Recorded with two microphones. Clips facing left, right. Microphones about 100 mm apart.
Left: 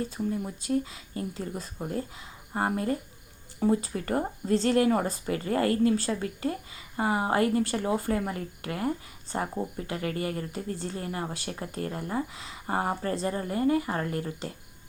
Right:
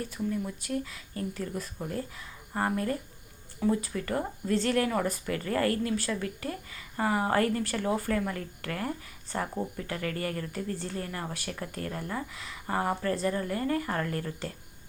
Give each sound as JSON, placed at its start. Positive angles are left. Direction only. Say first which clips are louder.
{"t": 0.0, "sound": "speech", "louder": "left 2 dB", "side_deg": 30}